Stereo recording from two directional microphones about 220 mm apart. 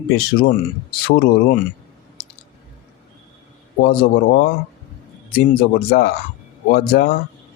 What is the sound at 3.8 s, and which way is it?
Speech, 45° left (ahead or behind).